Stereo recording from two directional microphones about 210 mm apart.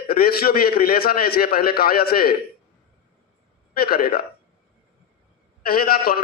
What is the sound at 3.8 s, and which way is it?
Speech, 45° left (ahead or behind).